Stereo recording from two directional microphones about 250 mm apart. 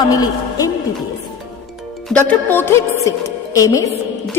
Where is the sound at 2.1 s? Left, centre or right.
Centre.